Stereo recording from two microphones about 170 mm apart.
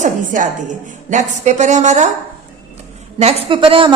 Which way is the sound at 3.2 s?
30° right (ahead or behind).